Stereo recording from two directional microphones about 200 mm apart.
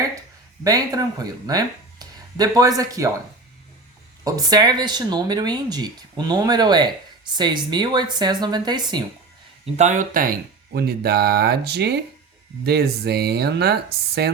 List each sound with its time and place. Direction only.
0.6 s speech: 20° right (ahead or behind)
4.2 s speech: 20° right (ahead or behind)
9.7 s speech: 40° right (ahead or behind); by 13.7 s 55° right (ahead or behind)